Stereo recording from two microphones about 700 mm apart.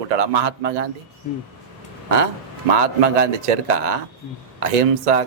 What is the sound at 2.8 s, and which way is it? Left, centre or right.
Speech, right.